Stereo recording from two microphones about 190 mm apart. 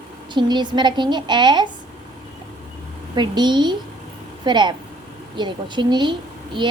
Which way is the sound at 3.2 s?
25° right (ahead or behind).